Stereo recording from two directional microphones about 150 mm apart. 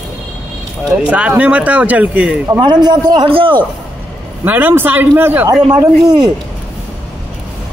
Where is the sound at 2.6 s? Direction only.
30° right (ahead or behind).